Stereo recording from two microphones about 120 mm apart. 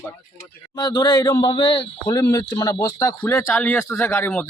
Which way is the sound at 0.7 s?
35° left (ahead or behind).